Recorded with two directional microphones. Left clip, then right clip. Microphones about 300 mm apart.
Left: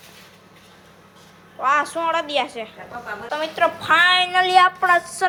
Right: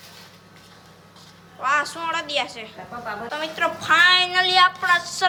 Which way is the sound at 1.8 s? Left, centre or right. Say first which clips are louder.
Left 4 dB; centre.